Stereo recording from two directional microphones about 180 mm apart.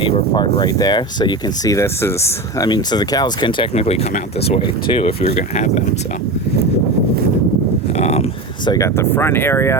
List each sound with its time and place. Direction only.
0.0 s speech: 30° left (ahead or behind)
7.9 s a sound: 35° left (ahead or behind)
8.6 s speech: 20° left (ahead or behind)